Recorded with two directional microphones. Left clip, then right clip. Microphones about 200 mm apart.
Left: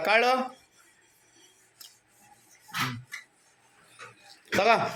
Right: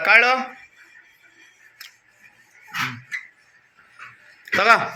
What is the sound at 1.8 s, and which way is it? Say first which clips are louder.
Filing: right 9 dB; 20° left (ahead or behind).